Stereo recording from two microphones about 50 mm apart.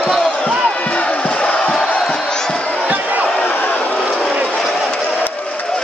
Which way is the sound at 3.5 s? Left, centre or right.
Left.